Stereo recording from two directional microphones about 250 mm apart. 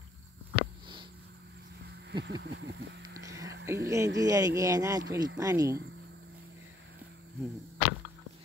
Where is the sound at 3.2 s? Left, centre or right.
Centre.